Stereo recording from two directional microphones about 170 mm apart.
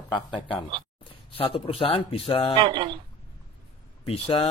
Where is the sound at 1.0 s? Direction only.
35° left (ahead or behind).